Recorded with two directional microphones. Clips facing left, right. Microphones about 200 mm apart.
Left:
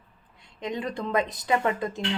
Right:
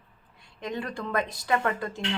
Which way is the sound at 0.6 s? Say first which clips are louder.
Left 2 dB; 20° left (ahead or behind).